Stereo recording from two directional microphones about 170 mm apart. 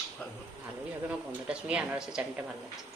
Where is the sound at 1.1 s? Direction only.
5° right (ahead or behind).